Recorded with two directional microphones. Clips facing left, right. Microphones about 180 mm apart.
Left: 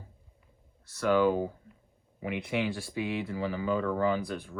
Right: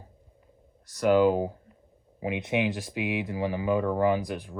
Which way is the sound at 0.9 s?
15° right (ahead or behind).